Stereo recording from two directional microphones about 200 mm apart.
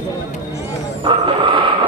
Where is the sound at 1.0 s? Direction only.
25° right (ahead or behind).